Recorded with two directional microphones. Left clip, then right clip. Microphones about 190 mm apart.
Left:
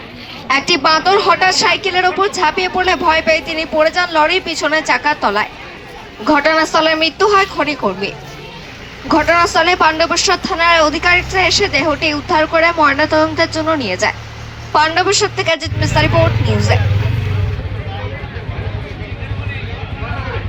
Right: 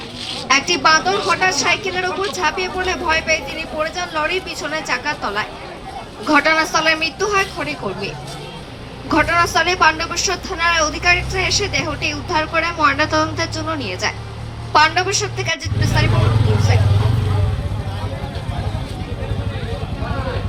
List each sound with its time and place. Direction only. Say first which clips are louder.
0.4 s a woman's voice: left 2 dB; 40° left (ahead or behind)